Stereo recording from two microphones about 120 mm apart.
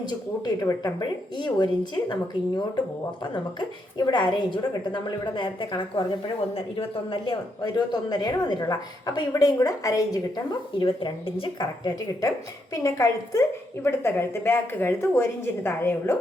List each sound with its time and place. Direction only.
0.0 s speech: 35° left (ahead or behind)
3.9 s speech: 35° left (ahead or behind)
6.5 s a woman's voice: 50° left (ahead or behind); by 16.1 s 20° left (ahead or behind)